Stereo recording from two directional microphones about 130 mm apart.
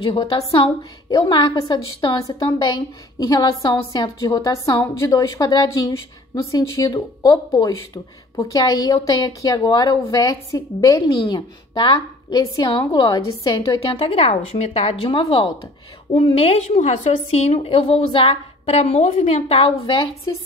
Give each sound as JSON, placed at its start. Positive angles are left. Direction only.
{"t": 0.0, "sound": "a woman's voice", "side_deg": 40}
{"t": 13.9, "sound": "a woman's voice", "side_deg": 45}
{"t": 16.3, "sound": "a woman's voice", "side_deg": 55}
{"t": 17.6, "sound": "a woman's voice", "side_deg": 45}